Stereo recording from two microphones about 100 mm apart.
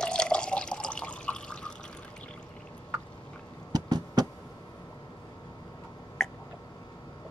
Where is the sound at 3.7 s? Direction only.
45° right (ahead or behind).